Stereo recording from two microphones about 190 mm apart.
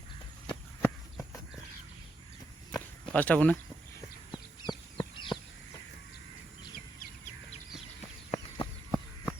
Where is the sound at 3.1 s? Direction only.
5° left (ahead or behind).